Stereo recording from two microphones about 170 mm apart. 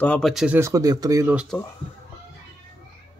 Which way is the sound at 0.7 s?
20° right (ahead or behind).